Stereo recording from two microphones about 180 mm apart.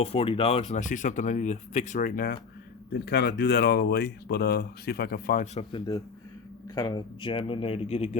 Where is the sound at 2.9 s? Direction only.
70° left (ahead or behind).